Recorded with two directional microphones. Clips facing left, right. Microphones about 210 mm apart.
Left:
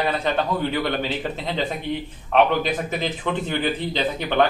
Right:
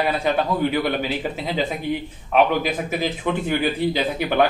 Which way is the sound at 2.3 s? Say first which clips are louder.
Even; 10° right (ahead or behind).